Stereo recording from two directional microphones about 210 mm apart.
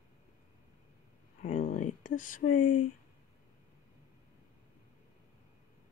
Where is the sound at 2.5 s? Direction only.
90° left.